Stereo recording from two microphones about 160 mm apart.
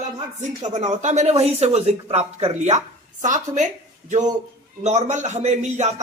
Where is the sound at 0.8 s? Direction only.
45° right (ahead or behind).